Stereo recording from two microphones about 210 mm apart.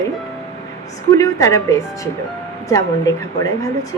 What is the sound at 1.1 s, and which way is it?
A woman's voice, 15° left (ahead or behind).